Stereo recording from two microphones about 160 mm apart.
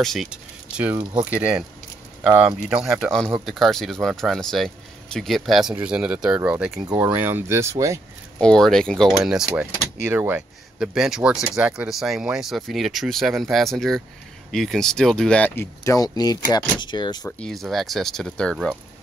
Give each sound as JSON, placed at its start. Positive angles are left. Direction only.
{"t": 0.0, "sound": "speech", "side_deg": 0}
{"t": 8.4, "sound": "speech", "side_deg": 5}
{"t": 17.4, "sound": "speech", "side_deg": 0}